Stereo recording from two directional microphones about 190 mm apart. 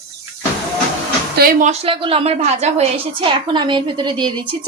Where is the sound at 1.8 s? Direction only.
30° right (ahead or behind).